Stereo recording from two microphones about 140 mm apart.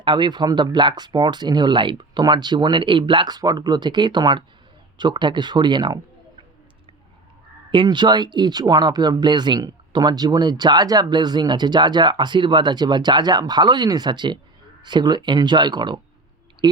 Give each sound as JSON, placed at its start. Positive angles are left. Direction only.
{"t": 0.0, "sound": "speech", "side_deg": -35}
{"t": 7.7, "sound": "speech", "side_deg": -35}
{"t": 16.6, "sound": "a sound", "side_deg": -30}